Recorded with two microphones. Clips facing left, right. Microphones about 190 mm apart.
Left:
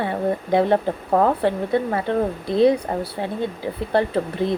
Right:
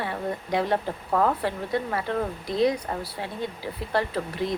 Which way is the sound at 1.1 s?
40° left (ahead or behind).